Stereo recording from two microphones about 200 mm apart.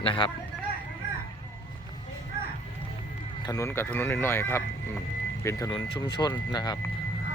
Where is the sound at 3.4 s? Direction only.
15° left (ahead or behind).